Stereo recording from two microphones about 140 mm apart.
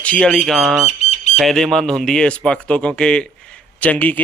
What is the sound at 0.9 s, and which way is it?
Bird, 55° left (ahead or behind).